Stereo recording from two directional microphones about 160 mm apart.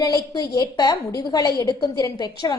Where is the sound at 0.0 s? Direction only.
25° left (ahead or behind).